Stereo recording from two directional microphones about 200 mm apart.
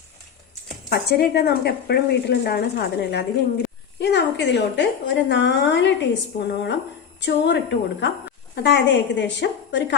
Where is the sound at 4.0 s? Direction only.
60° left (ahead or behind).